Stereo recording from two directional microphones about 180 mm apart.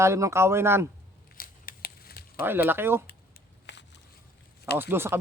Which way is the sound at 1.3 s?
50° left (ahead or behind).